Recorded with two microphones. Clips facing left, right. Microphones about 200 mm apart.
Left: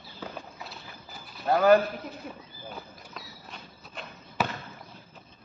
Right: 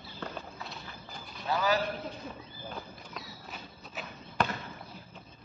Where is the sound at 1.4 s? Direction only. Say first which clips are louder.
Left 9 dB; 55° left (ahead or behind).